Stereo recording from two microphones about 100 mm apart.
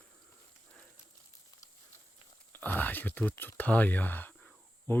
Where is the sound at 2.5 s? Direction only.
20° left (ahead or behind).